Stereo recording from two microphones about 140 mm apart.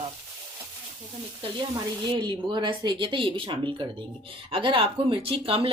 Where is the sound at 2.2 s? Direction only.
35° right (ahead or behind).